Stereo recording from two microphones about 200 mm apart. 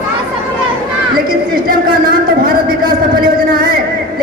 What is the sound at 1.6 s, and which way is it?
Speech, 45° right (ahead or behind).